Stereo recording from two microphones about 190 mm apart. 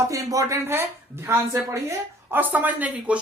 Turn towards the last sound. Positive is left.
turn(degrees=-10)  # may be behind; listen again after turning